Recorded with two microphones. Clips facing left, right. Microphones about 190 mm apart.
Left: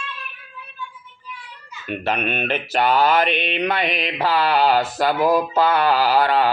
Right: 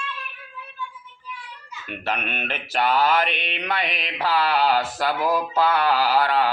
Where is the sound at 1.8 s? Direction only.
25° left (ahead or behind).